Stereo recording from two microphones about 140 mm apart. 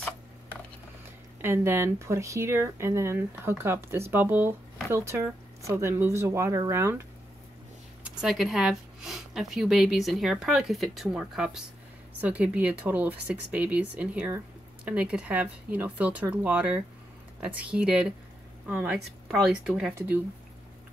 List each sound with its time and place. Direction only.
1.4 s speech: 15° right (ahead or behind)
8.0 s speech: 5° right (ahead or behind)
18.9 s speech: centre (ahead or behind); by 20.2 s 15° right (ahead or behind)